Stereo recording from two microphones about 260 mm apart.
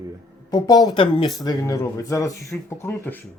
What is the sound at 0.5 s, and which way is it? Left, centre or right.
Speech, centre.